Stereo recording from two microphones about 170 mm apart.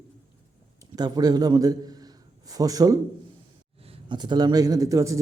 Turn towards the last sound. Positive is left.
turn(degrees=-20)  # may be behind; listen again after turning